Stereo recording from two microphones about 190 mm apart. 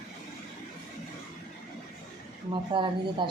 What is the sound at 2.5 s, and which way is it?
Speech, 25° right (ahead or behind).